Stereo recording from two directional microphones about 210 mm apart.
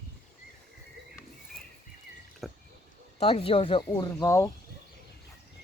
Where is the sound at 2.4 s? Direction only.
Centre (ahead or behind).